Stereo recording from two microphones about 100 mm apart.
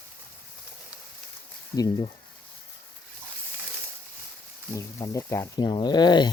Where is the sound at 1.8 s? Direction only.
45° left (ahead or behind).